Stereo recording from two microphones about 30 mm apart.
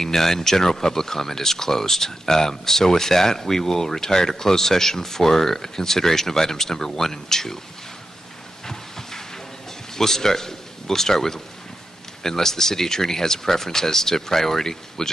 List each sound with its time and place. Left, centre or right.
0.0 s speech: centre
8.6 s a sound: centre
9.9 s a man's voice: centre